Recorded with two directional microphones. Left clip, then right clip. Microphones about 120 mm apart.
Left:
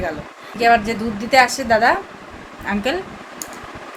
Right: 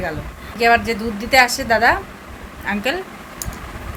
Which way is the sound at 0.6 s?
5° left (ahead or behind).